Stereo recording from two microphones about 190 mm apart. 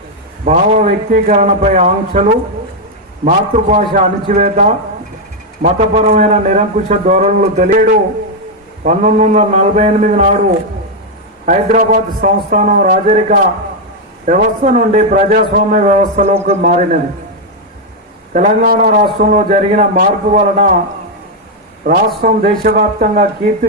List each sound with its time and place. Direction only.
0.4 s a man's voice: 40° right (ahead or behind)
11.4 s a man's voice: 40° right (ahead or behind)
18.3 s a man's voice: 45° right (ahead or behind)
22.2 s speech: 50° right (ahead or behind)